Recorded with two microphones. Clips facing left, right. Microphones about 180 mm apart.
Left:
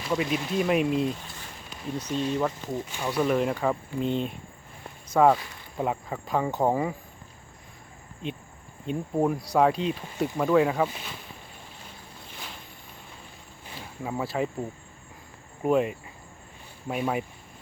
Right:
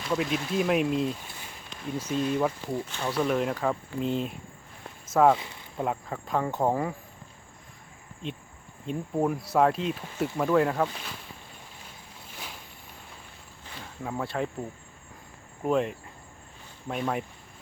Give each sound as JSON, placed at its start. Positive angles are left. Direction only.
{"t": 0.1, "sound": "speech", "side_deg": 0}
{"t": 2.6, "sound": "speech", "side_deg": 15}
{"t": 3.1, "sound": "speech", "side_deg": 0}
{"t": 4.8, "sound": "a sound", "side_deg": 0}
{"t": 5.7, "sound": "speech", "side_deg": 0}
{"t": 8.2, "sound": "speech", "side_deg": 0}
{"t": 13.7, "sound": "speech", "side_deg": 5}
{"t": 15.6, "sound": "speech", "side_deg": 5}